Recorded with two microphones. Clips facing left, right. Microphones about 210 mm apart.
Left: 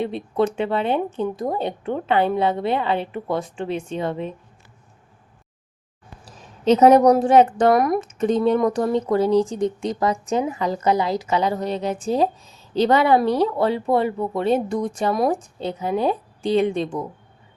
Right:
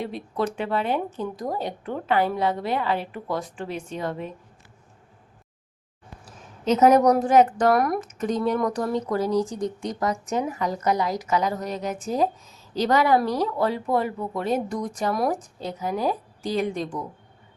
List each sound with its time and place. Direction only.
0.0 s speech: 25° left (ahead or behind)
6.2 s speech: 30° left (ahead or behind)